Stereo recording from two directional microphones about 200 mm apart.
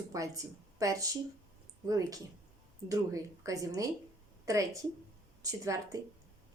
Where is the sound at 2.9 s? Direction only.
15° right (ahead or behind).